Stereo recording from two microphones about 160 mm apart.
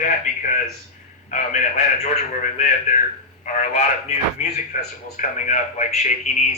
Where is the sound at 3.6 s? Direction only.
45° left (ahead or behind).